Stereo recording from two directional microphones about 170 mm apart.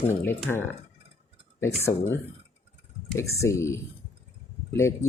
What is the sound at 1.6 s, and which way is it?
Speech, 15° left (ahead or behind).